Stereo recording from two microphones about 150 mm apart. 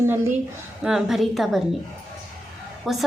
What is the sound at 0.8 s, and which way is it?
Speech, 5° right (ahead or behind).